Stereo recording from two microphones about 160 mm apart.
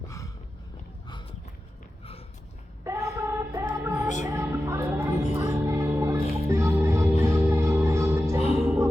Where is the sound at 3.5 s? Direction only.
15° right (ahead or behind).